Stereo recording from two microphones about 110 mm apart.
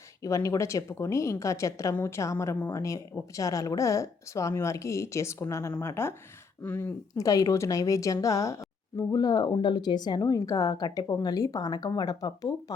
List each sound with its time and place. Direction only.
0.2 s speech: 30° left (ahead or behind)